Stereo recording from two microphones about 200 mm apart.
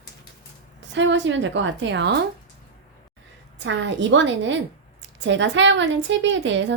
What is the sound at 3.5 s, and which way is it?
A woman's voice, 65° right (ahead or behind).